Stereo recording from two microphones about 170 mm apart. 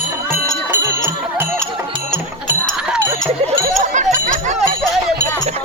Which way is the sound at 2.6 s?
5° right (ahead or behind).